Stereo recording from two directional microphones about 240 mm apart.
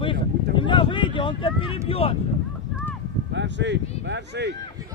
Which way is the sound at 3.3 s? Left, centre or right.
Right.